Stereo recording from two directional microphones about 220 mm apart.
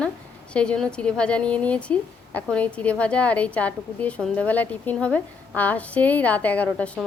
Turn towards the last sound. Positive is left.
turn(degrees=5)  # may be behind; listen again after turning